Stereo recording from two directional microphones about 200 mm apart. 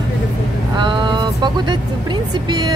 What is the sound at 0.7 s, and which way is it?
Speech, 20° right (ahead or behind).